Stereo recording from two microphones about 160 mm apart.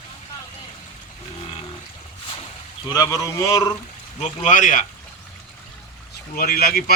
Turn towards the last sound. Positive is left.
turn(degrees=70)  # may be behind; listen again after turning